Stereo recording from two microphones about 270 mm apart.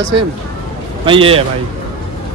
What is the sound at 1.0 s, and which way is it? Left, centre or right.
Speech, centre.